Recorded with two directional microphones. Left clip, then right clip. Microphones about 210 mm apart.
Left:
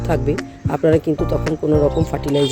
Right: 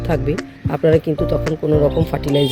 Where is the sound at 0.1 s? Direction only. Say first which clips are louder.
Left 1 dB; centre (ahead or behind).